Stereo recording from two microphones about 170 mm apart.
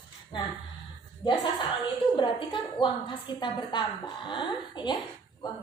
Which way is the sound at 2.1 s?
30° left (ahead or behind).